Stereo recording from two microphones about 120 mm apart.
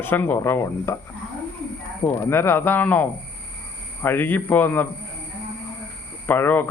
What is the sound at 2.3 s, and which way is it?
Speech, 20° left (ahead or behind).